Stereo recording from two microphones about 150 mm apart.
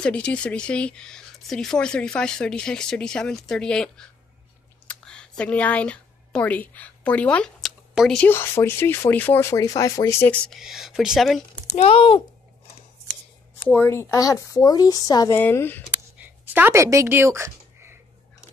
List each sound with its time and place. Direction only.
0.0 s speech: 10° left (ahead or behind)
4.8 s a sound: 5° left (ahead or behind)
8.2 s speech: 15° left (ahead or behind)
10.6 s speech: centre (ahead or behind)
11.7 s a child's voice: 45° left (ahead or behind)
13.7 s speech: 15° left (ahead or behind)
15.3 s speech: 15° left (ahead or behind)
16.2 s speech: 10° right (ahead or behind)